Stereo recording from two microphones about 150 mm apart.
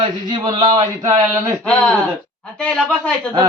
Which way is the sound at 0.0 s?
30° right (ahead or behind).